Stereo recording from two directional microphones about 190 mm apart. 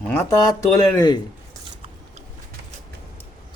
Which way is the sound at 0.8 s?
20° left (ahead or behind).